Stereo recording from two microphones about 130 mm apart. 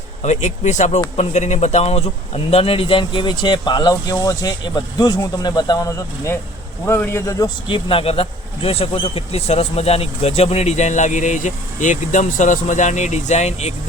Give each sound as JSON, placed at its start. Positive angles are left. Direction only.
{"t": 0.2, "sound": "speech", "side_deg": 65}